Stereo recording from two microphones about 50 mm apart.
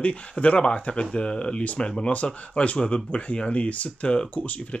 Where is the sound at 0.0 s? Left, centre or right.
Left.